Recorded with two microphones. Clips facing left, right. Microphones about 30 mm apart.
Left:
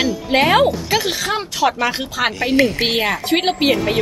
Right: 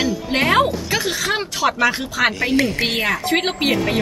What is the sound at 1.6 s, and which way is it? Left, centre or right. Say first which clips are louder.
Speech: left 3 dB; right.